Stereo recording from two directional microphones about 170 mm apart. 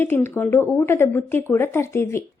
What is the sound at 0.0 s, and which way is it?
A woman's voice, 10° left (ahead or behind).